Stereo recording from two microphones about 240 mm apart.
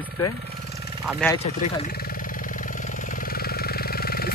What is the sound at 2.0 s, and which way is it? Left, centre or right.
Vehicle, left.